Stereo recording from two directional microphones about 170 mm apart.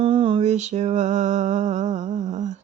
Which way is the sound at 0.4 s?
45° right (ahead or behind).